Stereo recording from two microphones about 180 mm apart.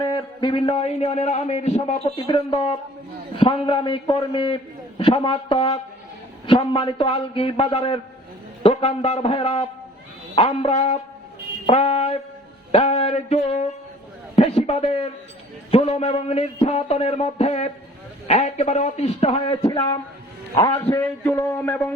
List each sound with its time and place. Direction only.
0.0 s a man's voice: 25° left (ahead or behind)